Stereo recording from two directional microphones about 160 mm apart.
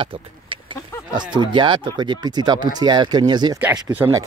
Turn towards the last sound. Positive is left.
turn(degrees=-10)  # may be behind; listen again after turning